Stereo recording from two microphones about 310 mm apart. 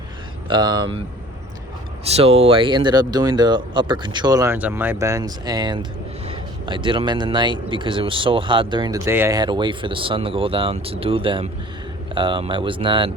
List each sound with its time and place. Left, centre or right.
0.4 s speech: centre
2.0 s speech: centre